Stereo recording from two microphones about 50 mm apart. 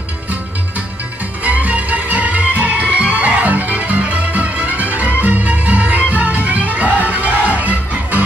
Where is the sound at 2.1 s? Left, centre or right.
Right.